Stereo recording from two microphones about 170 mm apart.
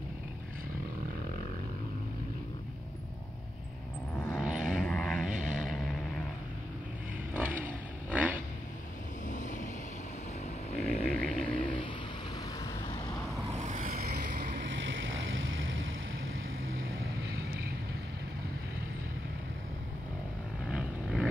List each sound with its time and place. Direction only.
4.4 s vehicle: 5° right (ahead or behind)
7.3 s vehicle: 10° right (ahead or behind)
9.3 s vehicle: 45° left (ahead or behind)
10.7 s a sound: 40° left (ahead or behind)
11.1 s a sound: 5° left (ahead or behind)
11.4 s vehicle: 30° left (ahead or behind)
13.5 s vehicle: 45° right (ahead or behind); by 15.0 s 75° right (ahead or behind)